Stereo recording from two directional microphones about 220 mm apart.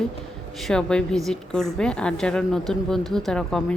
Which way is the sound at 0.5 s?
Centre (ahead or behind).